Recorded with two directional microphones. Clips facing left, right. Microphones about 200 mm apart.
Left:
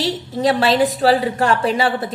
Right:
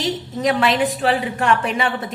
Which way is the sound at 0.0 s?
35° left (ahead or behind).